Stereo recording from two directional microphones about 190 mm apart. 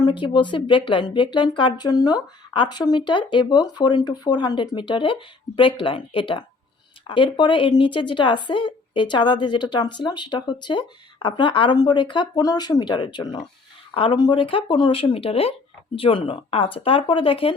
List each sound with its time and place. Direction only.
0.0 s speech: 25° left (ahead or behind)